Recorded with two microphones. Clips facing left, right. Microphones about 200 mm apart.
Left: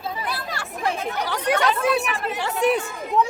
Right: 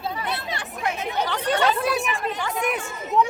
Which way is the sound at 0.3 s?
25° right (ahead or behind).